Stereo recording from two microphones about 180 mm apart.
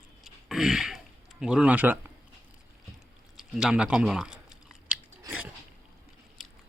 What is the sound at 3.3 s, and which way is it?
Chewing, 5° right (ahead or behind).